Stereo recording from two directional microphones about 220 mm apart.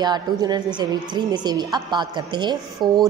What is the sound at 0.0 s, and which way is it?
A woman's voice, 20° right (ahead or behind).